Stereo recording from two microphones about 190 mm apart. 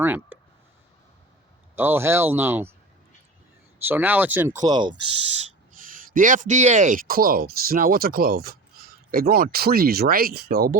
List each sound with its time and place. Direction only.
0.0 s speech: 10° right (ahead or behind)
1.7 s speech: 10° right (ahead or behind)
3.8 s speech: 10° right (ahead or behind)
4.6 s speech: 25° right (ahead or behind)
5.7 s speech: 45° right (ahead or behind)